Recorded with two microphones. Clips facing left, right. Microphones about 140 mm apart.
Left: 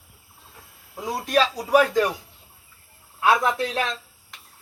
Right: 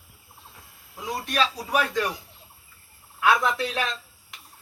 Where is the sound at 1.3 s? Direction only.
35° left (ahead or behind).